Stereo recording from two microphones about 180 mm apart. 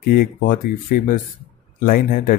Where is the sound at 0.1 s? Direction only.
50° left (ahead or behind).